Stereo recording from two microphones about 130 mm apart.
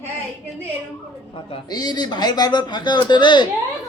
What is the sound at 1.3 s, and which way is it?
A man's voice, 35° left (ahead or behind).